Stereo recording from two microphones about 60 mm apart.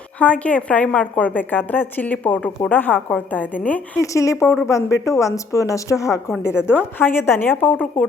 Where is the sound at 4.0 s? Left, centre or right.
Left.